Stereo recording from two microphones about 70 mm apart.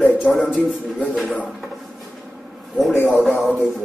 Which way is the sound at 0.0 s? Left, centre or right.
Left.